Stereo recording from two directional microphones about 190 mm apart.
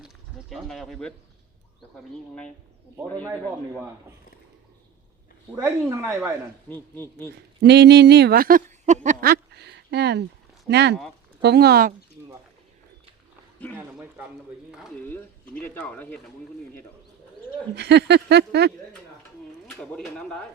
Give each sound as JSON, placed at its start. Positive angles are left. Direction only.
{"t": 0.5, "sound": "speech", "side_deg": 0}
{"t": 5.5, "sound": "a woman's voice", "side_deg": -15}
{"t": 6.7, "sound": "speech", "side_deg": 10}
{"t": 7.6, "sound": "speech", "side_deg": -60}
{"t": 9.2, "sound": "a sound", "side_deg": -55}
{"t": 10.7, "sound": "speech", "side_deg": -60}
{"t": 15.0, "sound": "speech", "side_deg": 10}
{"t": 17.7, "sound": "speech", "side_deg": -60}
{"t": 19.8, "sound": "speech", "side_deg": 5}